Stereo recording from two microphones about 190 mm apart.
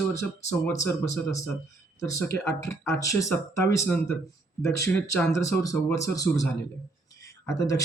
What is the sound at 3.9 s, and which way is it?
Speech, 5° left (ahead or behind).